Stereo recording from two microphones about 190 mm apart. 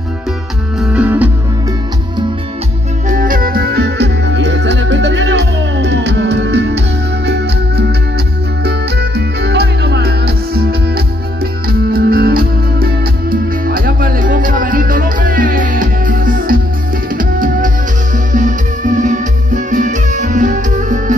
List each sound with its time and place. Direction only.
0.7 s music: 5° right (ahead or behind)
3.1 s music: 45° right (ahead or behind)
11.9 s music: 50° right (ahead or behind)